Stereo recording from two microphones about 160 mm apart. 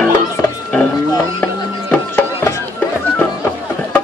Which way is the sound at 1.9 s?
15° left (ahead or behind).